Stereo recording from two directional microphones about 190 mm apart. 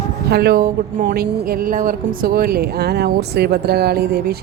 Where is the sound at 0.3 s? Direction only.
55° right (ahead or behind).